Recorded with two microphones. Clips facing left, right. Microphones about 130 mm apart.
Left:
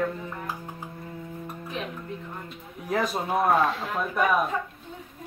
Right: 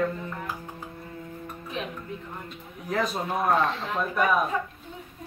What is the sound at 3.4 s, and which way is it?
Speech, 5° left (ahead or behind).